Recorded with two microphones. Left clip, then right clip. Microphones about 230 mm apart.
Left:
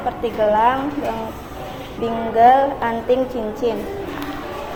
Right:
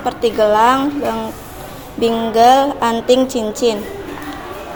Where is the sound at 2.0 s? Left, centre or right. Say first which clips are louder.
Right 3 dB; right.